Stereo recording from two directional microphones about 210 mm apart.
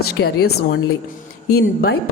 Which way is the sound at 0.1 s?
50° left (ahead or behind).